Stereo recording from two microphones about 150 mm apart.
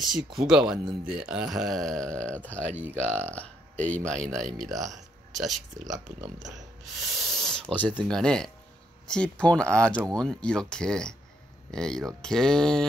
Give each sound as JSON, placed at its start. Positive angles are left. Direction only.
{"t": 0.0, "sound": "speech", "side_deg": 0}
{"t": 6.0, "sound": "speech", "side_deg": -55}
{"t": 7.3, "sound": "speech", "side_deg": 5}